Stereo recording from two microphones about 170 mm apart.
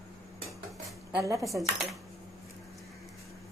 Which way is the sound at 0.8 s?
20° right (ahead or behind).